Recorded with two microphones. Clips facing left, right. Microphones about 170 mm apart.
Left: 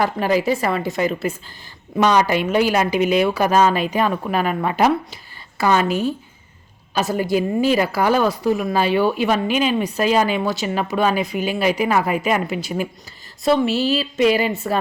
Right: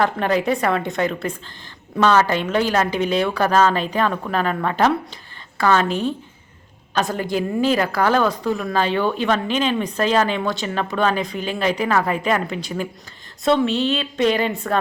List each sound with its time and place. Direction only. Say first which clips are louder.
0.0 s a woman's voice: left 1 dB; 5° left (ahead or behind)